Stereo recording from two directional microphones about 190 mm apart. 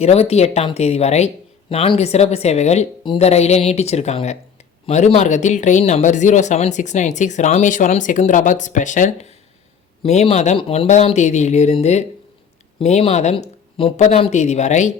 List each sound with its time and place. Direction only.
0.0 s speech: 35° left (ahead or behind)